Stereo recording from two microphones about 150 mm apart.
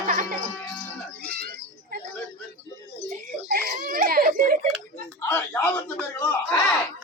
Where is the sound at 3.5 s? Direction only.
65° right (ahead or behind).